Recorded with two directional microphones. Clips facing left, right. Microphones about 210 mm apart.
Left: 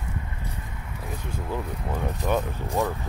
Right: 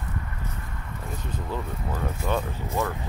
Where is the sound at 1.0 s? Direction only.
5° left (ahead or behind).